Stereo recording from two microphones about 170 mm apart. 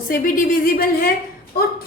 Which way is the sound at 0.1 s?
55° left (ahead or behind).